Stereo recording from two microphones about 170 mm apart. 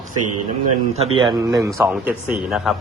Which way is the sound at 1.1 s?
30° right (ahead or behind).